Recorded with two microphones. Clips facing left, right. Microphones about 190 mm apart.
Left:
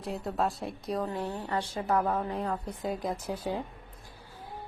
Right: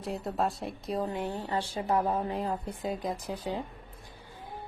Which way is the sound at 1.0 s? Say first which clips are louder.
Right 1 dB; 20° right (ahead or behind).